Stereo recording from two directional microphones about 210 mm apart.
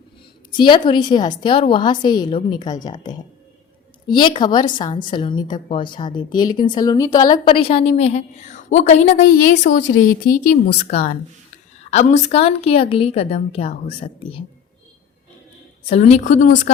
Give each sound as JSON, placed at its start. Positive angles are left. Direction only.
{"t": 0.5, "sound": "a woman's voice", "side_deg": 25}
{"t": 15.9, "sound": "a woman's voice", "side_deg": 30}